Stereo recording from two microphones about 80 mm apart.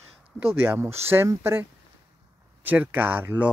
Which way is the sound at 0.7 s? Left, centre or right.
Right.